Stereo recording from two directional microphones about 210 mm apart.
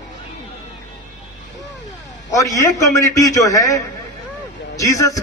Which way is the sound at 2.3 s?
15° left (ahead or behind).